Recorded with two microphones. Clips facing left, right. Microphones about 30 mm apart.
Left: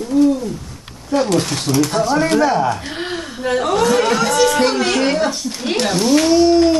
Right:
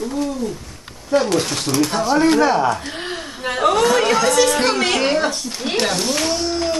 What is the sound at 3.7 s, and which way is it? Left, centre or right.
Speech, right.